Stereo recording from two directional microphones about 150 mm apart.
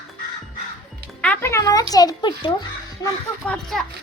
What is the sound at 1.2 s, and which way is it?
Speech, 10° left (ahead or behind).